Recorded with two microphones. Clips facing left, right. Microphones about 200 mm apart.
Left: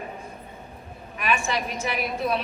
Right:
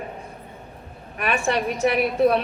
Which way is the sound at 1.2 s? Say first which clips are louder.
Right 3 dB; 60° right (ahead or behind).